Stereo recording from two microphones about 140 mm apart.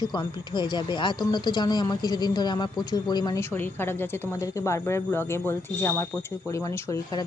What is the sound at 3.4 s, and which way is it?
A woman's voice, 15° left (ahead or behind).